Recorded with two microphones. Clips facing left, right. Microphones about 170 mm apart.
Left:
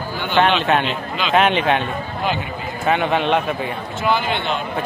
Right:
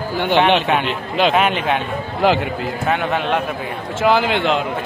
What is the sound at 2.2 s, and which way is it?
Speech, 90° right.